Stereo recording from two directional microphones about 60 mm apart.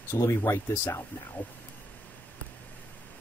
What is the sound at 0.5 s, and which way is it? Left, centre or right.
Speech, left.